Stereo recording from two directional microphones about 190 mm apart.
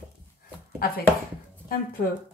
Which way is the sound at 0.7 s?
50° left (ahead or behind).